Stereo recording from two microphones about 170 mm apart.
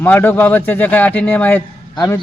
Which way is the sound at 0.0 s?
10° left (ahead or behind).